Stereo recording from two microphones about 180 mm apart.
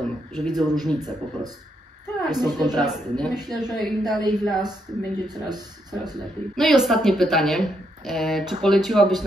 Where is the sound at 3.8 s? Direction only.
Centre (ahead or behind).